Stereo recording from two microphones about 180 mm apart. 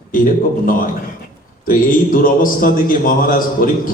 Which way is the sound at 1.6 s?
50° left (ahead or behind).